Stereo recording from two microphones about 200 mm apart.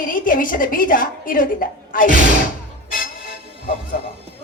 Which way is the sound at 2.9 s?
45° left (ahead or behind).